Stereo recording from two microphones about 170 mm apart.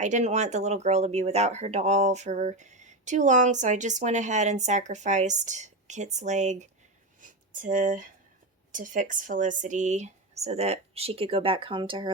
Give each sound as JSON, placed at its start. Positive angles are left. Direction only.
{"t": 0.0, "sound": "speech", "side_deg": -45}